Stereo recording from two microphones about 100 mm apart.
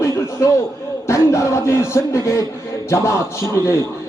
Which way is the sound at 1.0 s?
30° left (ahead or behind).